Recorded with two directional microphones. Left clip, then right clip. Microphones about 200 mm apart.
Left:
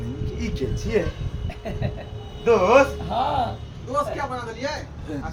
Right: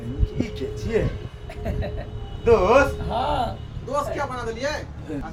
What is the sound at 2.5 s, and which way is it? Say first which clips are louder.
Speech: even; centre (ahead or behind).